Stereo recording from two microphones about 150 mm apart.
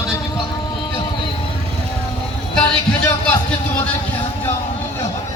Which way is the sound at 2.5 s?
5° left (ahead or behind).